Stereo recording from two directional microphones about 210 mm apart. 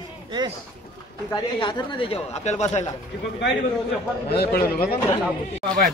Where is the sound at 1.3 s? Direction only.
20° left (ahead or behind).